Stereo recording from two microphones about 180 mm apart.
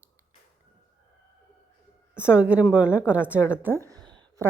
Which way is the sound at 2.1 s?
5° right (ahead or behind).